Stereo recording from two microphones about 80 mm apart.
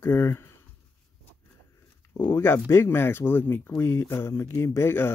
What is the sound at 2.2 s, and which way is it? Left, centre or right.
Speech, left.